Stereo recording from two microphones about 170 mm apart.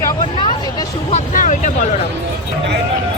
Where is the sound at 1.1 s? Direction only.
45° left (ahead or behind).